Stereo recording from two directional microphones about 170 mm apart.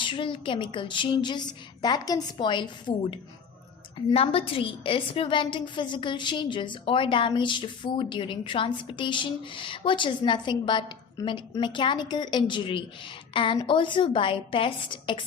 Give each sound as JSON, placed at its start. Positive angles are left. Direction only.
{"t": 0.0, "sound": "a woman's voice", "side_deg": 30}
{"t": 4.1, "sound": "a woman's voice", "side_deg": 35}